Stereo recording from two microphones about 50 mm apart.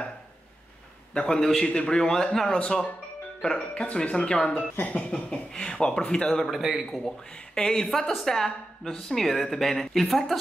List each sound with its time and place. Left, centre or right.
1.1 s speech: centre
1.7 s speech: centre
5.1 s speech: centre
6.4 s speech: centre
7.1 s speech: centre